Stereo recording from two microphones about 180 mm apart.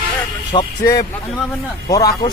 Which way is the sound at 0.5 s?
25° left (ahead or behind).